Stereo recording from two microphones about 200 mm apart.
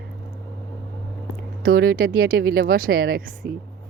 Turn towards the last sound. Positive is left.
turn(degrees=-50)  # may be behind; listen again after turning